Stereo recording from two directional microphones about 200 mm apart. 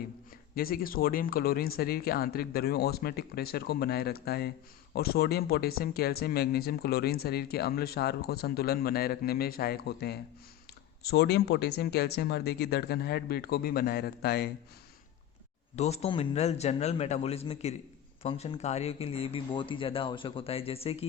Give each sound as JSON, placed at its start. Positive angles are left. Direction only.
{"t": 0.5, "sound": "speech", "side_deg": 45}
{"t": 15.7, "sound": "speech", "side_deg": 30}